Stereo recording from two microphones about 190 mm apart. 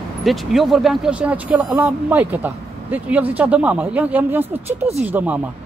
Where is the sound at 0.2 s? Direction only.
Centre (ahead or behind).